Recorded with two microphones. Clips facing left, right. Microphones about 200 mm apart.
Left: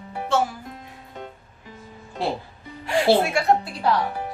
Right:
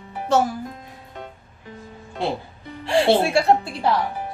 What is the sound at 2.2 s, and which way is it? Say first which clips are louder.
Speech: right 1 dB; centre (ahead or behind).